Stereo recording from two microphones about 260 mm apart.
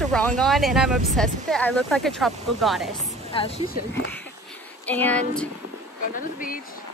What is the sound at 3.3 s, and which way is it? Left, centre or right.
Speech, left.